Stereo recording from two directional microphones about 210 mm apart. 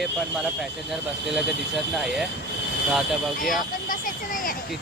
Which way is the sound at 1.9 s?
Centre (ahead or behind).